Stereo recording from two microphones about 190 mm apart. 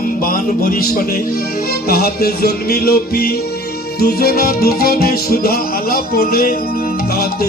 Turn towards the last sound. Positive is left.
turn(degrees=55)  # may be behind; listen again after turning